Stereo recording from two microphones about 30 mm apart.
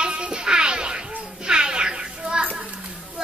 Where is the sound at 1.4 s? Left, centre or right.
Right.